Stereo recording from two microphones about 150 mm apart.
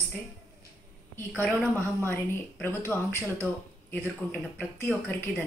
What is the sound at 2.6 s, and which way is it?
A woman's voice, 15° left (ahead or behind).